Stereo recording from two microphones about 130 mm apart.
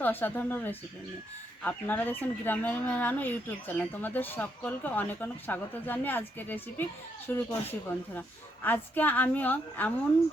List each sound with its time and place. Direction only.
0.0 s speech: 15° left (ahead or behind)